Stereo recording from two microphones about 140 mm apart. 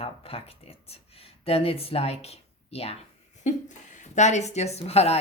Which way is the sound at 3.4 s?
60° left (ahead or behind).